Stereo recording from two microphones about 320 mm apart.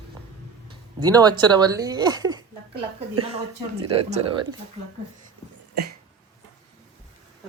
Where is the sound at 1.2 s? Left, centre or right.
Centre.